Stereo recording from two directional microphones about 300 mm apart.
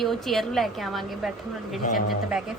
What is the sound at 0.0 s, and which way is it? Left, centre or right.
A woman's voice, centre.